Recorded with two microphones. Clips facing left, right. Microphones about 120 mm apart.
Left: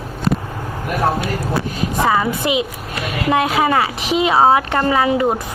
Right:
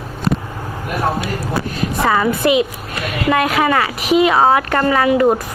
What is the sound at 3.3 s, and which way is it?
Speech, 25° left (ahead or behind).